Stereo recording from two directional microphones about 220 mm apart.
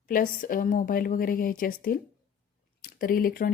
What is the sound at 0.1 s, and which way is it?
Speech, 40° left (ahead or behind).